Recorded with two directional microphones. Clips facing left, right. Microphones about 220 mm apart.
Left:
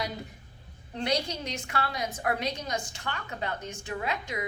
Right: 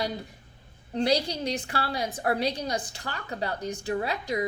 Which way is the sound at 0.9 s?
35° right (ahead or behind).